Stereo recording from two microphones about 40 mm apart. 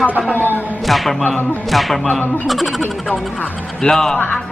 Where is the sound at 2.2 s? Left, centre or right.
Left.